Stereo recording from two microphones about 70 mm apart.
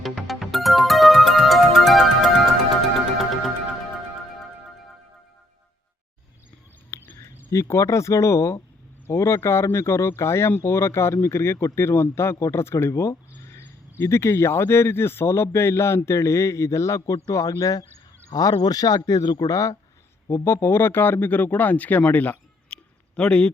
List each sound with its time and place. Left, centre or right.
0.0 s music: centre
6.9 s a sound: left
7.5 s speech: left
20.3 s speech: left; by 23.5 s centre